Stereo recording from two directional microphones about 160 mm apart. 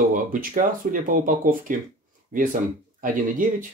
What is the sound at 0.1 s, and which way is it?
Speech, 60° right (ahead or behind).